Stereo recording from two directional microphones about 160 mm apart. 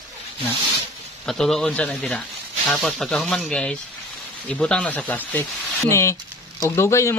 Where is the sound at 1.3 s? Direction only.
5° left (ahead or behind).